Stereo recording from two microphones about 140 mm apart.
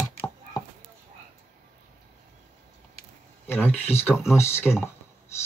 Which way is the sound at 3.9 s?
15° left (ahead or behind).